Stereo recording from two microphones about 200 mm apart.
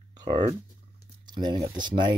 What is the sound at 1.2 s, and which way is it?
Speech, 20° right (ahead or behind).